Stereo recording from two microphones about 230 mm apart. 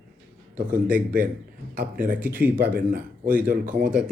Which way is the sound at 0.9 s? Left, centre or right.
Right.